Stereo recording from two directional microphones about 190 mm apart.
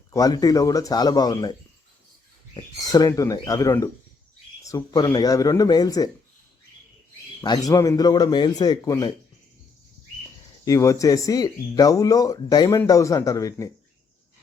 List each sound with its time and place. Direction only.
0.1 s speech: 20° left (ahead or behind)
2.8 s speech: 20° left (ahead or behind)
7.4 s speech: 20° left (ahead or behind)
10.7 s speech: 15° left (ahead or behind)